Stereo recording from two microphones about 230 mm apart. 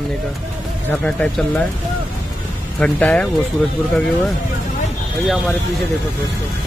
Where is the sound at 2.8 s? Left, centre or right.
Centre.